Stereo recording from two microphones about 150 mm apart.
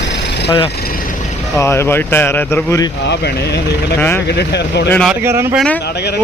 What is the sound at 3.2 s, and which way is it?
Speech, 90° left.